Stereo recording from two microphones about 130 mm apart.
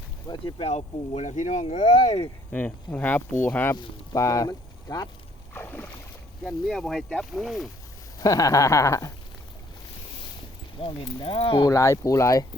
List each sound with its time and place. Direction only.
0.3 s speech: 35° left (ahead or behind)
0.6 s speech: 55° left (ahead or behind)
2.5 s speech: 10° left (ahead or behind); by 5.0 s 30° left (ahead or behind)
5.5 s boat: 15° left (ahead or behind)
6.4 s speech: 5° left (ahead or behind)
8.2 s speech: 25° left (ahead or behind)
10.8 s speech: 40° left (ahead or behind)
11.6 s speech: 25° left (ahead or behind)